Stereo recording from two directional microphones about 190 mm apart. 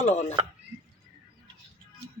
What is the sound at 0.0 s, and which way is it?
Speech, 35° left (ahead or behind).